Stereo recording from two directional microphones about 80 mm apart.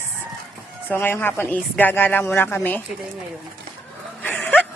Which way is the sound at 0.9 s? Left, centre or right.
Left.